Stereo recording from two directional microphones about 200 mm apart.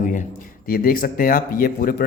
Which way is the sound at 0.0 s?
40° left (ahead or behind).